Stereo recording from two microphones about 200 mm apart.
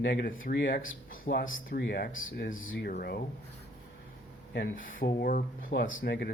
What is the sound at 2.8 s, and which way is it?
Speech, 50° left (ahead or behind).